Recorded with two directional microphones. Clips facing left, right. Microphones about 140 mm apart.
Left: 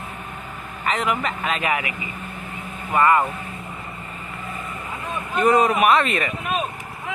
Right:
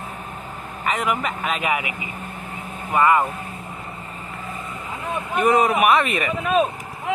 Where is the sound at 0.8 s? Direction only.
10° right (ahead or behind).